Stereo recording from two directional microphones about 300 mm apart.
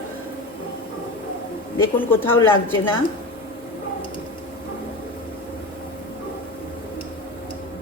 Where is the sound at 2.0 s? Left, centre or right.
Centre.